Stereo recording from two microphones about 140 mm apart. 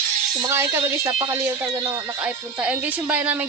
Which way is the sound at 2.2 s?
10° right (ahead or behind).